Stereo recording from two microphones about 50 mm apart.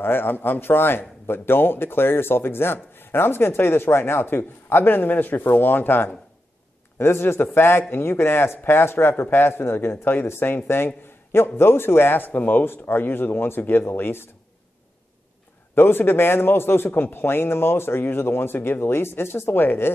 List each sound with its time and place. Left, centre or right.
0.0 s a man's voice: left
7.0 s a man's voice: left
12.6 s a man's voice: left
15.7 s a man's voice: left